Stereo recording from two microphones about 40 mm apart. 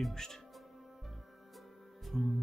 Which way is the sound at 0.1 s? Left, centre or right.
Centre.